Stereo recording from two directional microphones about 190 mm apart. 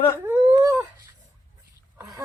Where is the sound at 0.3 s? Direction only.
15° right (ahead or behind).